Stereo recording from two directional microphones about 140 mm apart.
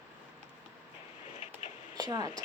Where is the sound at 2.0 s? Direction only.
30° right (ahead or behind).